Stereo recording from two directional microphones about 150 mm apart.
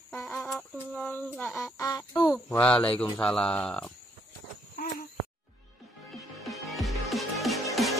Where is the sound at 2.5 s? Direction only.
10° left (ahead or behind).